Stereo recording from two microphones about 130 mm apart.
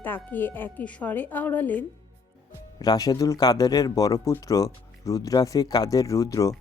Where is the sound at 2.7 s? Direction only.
30° left (ahead or behind).